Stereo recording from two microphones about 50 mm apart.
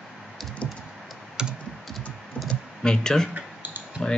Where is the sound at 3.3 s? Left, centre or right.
Right.